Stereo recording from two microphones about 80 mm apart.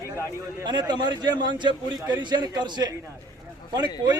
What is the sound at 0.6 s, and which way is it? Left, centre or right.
A man's voice, right.